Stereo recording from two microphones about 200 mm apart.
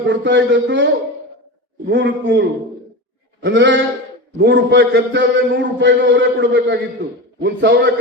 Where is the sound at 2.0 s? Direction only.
70° right (ahead or behind).